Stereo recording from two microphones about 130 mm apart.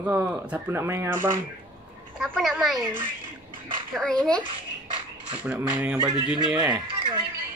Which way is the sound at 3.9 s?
5° left (ahead or behind).